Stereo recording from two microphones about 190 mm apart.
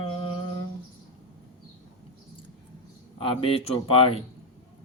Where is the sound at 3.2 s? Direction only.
30° left (ahead or behind).